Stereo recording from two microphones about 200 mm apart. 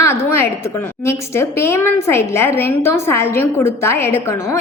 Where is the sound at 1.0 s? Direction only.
15° left (ahead or behind).